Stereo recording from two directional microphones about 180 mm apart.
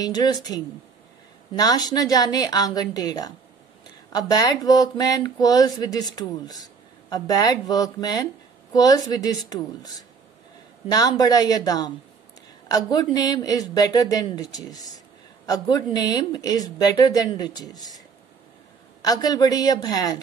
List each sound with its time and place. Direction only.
0.0 s speech: 20° left (ahead or behind)
1.6 s speech: 20° left (ahead or behind)
10.9 s speech: 20° left (ahead or behind)
19.0 s speech: 20° left (ahead or behind)